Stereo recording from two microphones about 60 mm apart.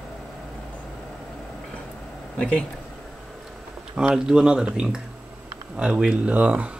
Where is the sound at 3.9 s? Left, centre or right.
Centre.